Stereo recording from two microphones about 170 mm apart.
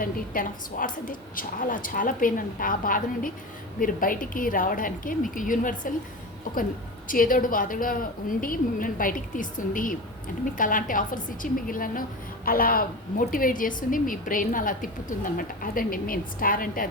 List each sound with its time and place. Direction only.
0.0 s a woman's voice: 55° left (ahead or behind)